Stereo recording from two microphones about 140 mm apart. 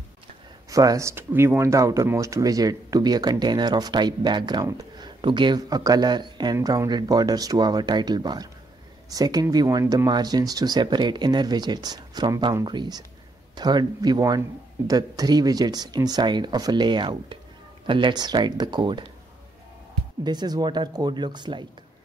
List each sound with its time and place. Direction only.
0.7 s speech: 25° right (ahead or behind)
20.2 s speech: 30° right (ahead or behind)